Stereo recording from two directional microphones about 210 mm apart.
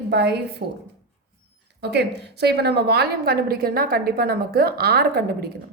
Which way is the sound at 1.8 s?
55° right (ahead or behind).